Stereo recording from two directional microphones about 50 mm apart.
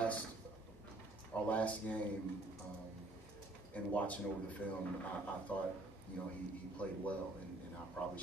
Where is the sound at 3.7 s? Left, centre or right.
Left.